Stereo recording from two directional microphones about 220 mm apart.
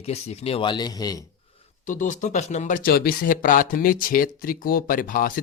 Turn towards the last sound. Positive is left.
turn(degrees=40)  # may be behind; listen again after turning